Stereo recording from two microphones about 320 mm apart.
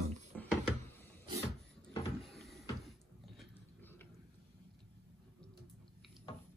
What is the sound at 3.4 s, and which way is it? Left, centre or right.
Gears, centre.